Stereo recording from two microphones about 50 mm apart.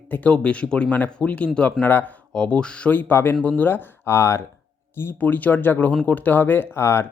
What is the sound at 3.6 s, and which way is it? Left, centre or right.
Speech, left.